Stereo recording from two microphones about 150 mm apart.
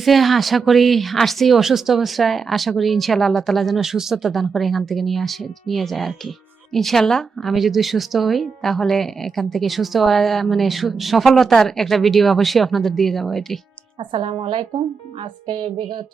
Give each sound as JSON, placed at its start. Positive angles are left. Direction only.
{"t": 0.0, "sound": "a woman's voice", "side_deg": 0}
{"t": 14.1, "sound": "music", "side_deg": -35}